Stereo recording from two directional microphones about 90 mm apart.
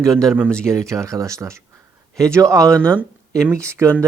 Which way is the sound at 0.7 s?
35° right (ahead or behind).